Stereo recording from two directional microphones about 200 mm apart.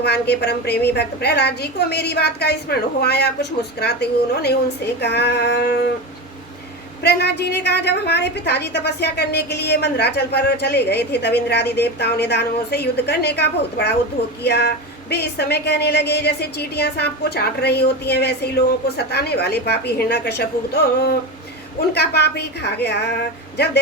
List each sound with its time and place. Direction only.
0.0 s a woman's voice: 55° left (ahead or behind)
7.0 s a woman's voice: 55° left (ahead or behind)